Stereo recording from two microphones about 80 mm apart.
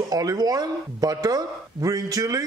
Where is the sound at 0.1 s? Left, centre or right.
Right.